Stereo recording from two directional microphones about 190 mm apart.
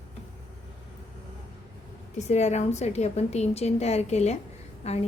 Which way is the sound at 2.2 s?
35° left (ahead or behind).